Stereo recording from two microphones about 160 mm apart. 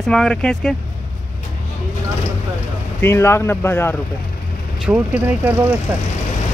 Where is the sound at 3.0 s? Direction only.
15° left (ahead or behind).